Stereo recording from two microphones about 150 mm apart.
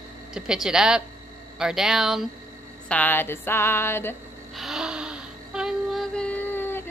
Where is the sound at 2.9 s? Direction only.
10° left (ahead or behind).